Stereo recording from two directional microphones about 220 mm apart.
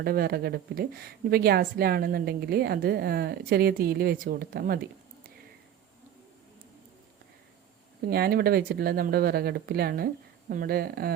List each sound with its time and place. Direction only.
0.0 s speech: 45° right (ahead or behind)
8.0 s speech: 45° right (ahead or behind)